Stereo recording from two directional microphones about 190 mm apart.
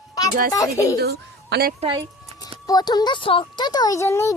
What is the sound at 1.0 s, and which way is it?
Speech, 55° right (ahead or behind).